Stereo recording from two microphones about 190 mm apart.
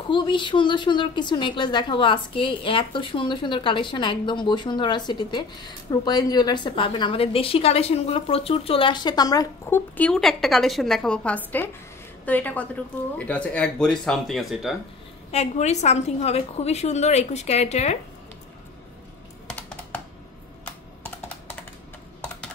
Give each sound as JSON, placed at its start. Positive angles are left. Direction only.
{"t": 0.1, "sound": "a woman's voice", "side_deg": 25}
{"t": 15.3, "sound": "a woman's voice", "side_deg": 35}